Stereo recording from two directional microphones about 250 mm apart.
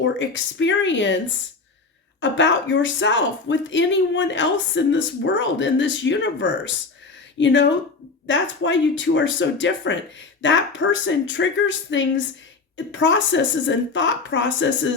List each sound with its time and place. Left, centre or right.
0.0 s speech: left
2.2 s speech: left